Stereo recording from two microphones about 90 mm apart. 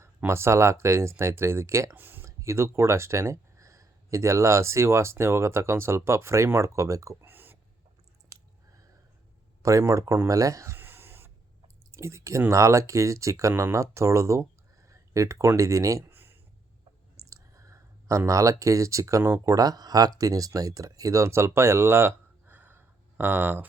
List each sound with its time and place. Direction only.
0.3 s speech: 30° right (ahead or behind)
7.3 s a sound: 20° right (ahead or behind)
9.6 s speech: 35° right (ahead or behind)
16.0 s a sound: 25° right (ahead or behind)
17.2 s clicking: 35° right (ahead or behind)
18.3 s speech: 35° right (ahead or behind); by 23.6 s 20° right (ahead or behind)